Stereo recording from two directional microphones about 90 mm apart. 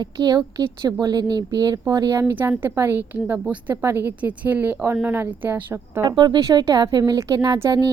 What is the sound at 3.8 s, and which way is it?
Speech, 25° right (ahead or behind).